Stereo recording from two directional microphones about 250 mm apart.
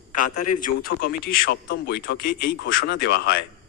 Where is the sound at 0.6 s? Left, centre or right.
Left.